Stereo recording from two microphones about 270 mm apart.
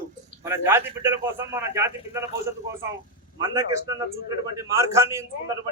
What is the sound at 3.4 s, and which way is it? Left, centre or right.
A man's voice, centre.